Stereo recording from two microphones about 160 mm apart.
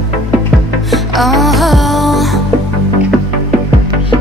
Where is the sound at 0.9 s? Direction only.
Centre (ahead or behind).